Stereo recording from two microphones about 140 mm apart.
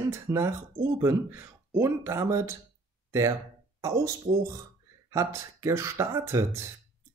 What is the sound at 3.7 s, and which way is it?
Speech, 25° right (ahead or behind).